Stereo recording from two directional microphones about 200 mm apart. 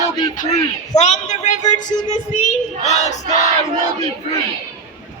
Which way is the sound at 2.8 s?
35° left (ahead or behind).